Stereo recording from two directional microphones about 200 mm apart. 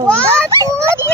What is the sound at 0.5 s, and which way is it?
Speech, 15° right (ahead or behind).